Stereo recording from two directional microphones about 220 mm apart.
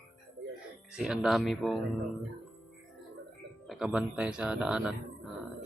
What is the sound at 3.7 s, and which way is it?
Speech, 5° right (ahead or behind).